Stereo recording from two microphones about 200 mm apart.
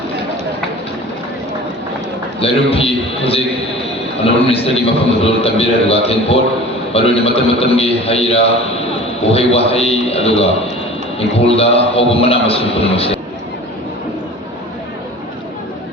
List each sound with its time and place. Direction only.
2.4 s a man's voice: 30° left (ahead or behind)